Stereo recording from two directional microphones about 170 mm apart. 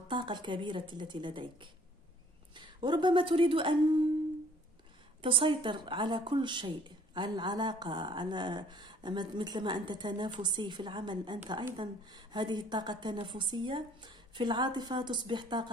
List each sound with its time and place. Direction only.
0.1 s a woman's voice: 25° right (ahead or behind)
5.2 s a woman's voice: 30° right (ahead or behind)